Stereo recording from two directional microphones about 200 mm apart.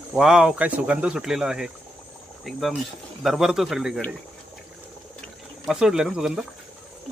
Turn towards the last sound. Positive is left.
turn(degrees=0)  # may be behind; listen again after turning